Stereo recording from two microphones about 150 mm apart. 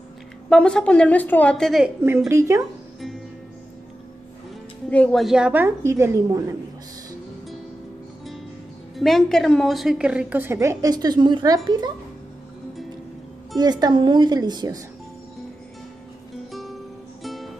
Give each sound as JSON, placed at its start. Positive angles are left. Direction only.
{"t": 0.5, "sound": "a woman's voice", "side_deg": 5}
{"t": 2.0, "sound": "a woman's voice", "side_deg": -20}
{"t": 4.8, "sound": "speech", "side_deg": 5}
{"t": 5.2, "sound": "a woman's voice", "side_deg": -5}
{"t": 8.9, "sound": "a woman's voice", "side_deg": 0}
{"t": 13.6, "sound": "a woman's voice", "side_deg": -25}
{"t": 16.5, "sound": "music", "side_deg": 0}